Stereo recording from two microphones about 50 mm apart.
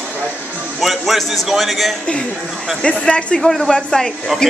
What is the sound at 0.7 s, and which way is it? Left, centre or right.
A man's voice, centre.